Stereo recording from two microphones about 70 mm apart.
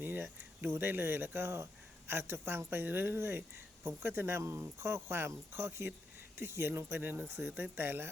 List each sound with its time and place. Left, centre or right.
0.0 s speech: right
7.0 s speech: right